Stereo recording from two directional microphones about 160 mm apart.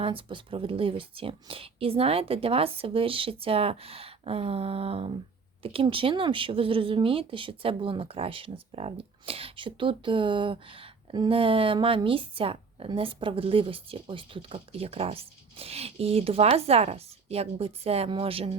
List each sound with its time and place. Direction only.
0.0 s speech: 35° right (ahead or behind)